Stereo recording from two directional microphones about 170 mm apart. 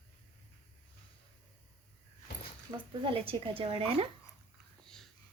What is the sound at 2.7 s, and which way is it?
Speech, 30° right (ahead or behind).